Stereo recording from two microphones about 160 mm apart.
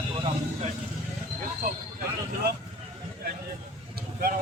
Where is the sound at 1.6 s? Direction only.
65° right (ahead or behind).